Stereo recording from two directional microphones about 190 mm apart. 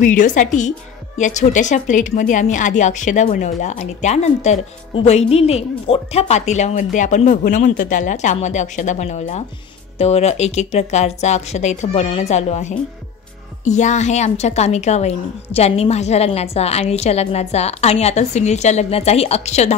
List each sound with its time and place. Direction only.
0.0 s a woman's voice: 45° left (ahead or behind)